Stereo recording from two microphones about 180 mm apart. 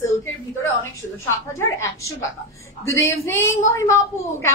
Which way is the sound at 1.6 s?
15° left (ahead or behind).